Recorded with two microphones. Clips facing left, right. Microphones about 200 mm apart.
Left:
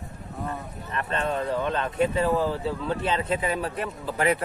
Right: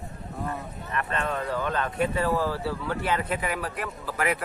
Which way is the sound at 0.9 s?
30° left (ahead or behind).